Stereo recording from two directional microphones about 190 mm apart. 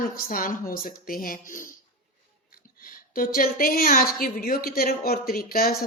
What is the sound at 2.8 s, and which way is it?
Speech, 50° left (ahead or behind).